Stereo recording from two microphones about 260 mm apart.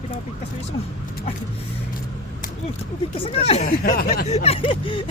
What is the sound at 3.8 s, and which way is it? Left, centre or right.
Speech, left.